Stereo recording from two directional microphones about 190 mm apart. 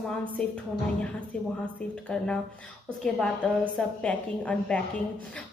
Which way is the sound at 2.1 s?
5° left (ahead or behind).